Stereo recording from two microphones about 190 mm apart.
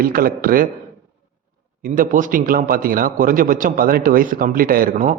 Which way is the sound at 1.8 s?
45° right (ahead or behind).